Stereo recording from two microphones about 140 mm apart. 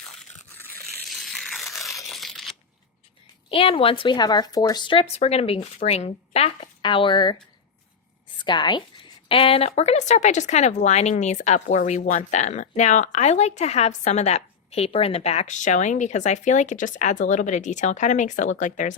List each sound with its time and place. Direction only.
1.0 s a sound: centre (ahead or behind)
2.0 s tearing: centre (ahead or behind)
3.5 s a woman's voice: 40° left (ahead or behind); by 18.9 s 65° left (ahead or behind)